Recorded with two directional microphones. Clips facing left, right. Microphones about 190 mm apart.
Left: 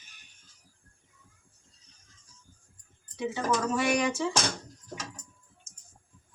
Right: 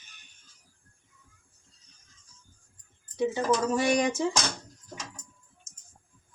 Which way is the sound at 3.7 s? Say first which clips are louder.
Right 2 dB; 35° right (ahead or behind).